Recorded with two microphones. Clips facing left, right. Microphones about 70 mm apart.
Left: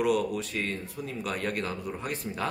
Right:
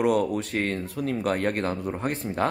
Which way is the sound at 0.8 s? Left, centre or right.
Right.